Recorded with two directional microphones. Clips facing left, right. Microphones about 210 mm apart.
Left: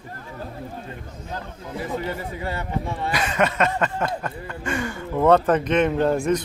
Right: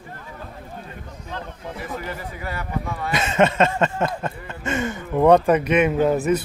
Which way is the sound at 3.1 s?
25° right (ahead or behind).